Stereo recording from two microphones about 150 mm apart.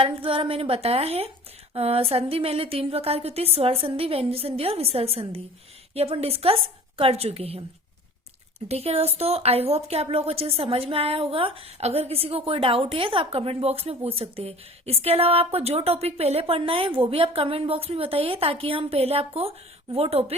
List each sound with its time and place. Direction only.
0.0 s a woman's voice: 35° right (ahead or behind)